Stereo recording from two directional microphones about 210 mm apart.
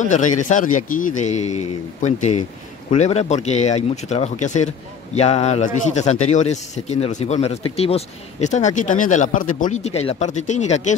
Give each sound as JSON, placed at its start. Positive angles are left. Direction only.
{"t": 0.1, "sound": "speech", "side_deg": 35}